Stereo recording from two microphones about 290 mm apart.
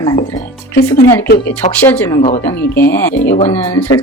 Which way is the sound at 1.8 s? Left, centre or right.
Centre.